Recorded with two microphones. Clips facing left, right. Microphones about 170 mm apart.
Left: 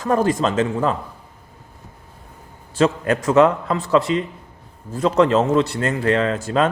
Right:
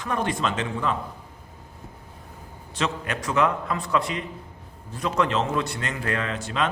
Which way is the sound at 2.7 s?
45° left (ahead or behind).